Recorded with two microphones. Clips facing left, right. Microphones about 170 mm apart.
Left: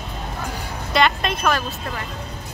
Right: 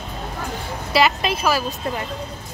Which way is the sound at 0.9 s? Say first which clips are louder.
Right 1 dB; 5° right (ahead or behind).